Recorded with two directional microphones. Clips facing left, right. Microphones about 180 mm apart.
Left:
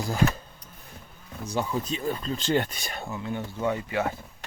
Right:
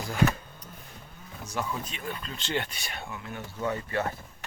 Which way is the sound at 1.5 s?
35° left (ahead or behind).